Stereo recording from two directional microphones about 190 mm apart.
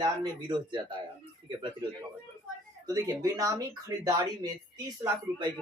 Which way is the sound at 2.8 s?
20° right (ahead or behind).